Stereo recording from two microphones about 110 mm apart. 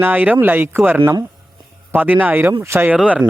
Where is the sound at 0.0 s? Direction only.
15° right (ahead or behind).